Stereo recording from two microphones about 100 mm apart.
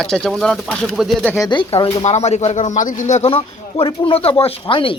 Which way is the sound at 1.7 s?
75° left (ahead or behind).